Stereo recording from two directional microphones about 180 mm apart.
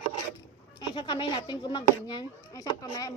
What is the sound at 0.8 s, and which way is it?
Speech, 25° left (ahead or behind).